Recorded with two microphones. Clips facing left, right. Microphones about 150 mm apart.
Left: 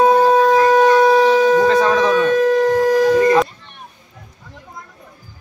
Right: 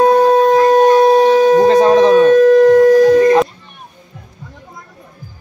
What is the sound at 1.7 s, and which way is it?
Shofar, 35° right (ahead or behind).